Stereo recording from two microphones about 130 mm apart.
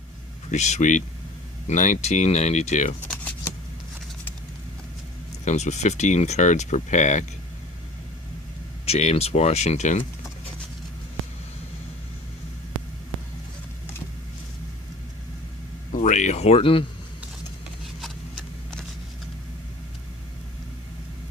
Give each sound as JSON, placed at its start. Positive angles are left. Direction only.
{"t": 0.5, "sound": "speech", "side_deg": 60}
{"t": 5.5, "sound": "speech", "side_deg": 65}
{"t": 8.9, "sound": "speech", "side_deg": 55}
{"t": 15.9, "sound": "speech", "side_deg": 75}